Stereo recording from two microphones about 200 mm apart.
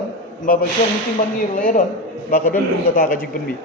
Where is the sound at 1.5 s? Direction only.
40° left (ahead or behind).